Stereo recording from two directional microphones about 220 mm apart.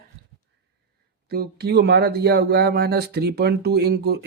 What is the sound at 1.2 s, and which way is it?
Speech, 45° right (ahead or behind).